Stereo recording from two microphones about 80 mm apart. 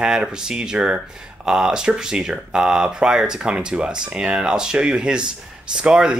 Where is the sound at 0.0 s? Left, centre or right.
Centre.